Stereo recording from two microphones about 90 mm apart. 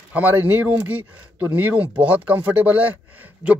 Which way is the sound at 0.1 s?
20° right (ahead or behind).